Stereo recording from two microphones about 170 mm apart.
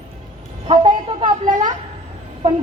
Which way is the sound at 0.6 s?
30° right (ahead or behind).